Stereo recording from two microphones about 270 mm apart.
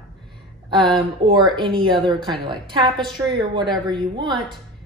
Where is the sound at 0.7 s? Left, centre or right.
Centre.